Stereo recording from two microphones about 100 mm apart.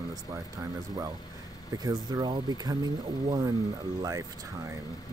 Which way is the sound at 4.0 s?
35° right (ahead or behind).